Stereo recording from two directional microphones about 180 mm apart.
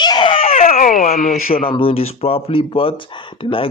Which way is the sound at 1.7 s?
30° left (ahead or behind).